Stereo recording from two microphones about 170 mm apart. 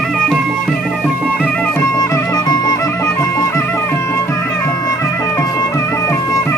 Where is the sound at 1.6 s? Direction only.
15° left (ahead or behind).